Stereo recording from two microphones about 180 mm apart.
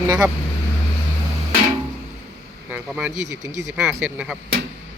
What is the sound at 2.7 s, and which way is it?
Speech, 10° right (ahead or behind).